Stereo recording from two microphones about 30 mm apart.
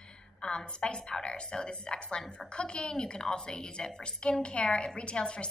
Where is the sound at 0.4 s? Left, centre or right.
Left.